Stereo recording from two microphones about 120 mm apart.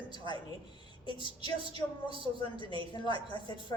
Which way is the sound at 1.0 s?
40° left (ahead or behind).